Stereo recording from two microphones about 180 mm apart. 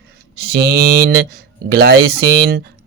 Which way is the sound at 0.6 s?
55° right (ahead or behind).